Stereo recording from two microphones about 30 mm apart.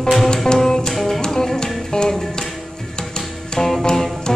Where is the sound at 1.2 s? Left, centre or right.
Left.